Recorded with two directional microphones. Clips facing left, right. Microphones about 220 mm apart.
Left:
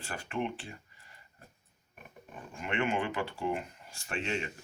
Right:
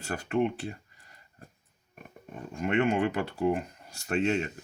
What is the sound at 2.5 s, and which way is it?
Speech, 40° right (ahead or behind).